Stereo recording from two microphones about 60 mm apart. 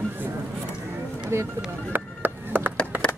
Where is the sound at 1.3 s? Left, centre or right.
Right.